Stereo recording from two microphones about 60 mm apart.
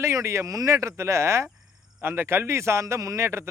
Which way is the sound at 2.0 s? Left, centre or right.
Right.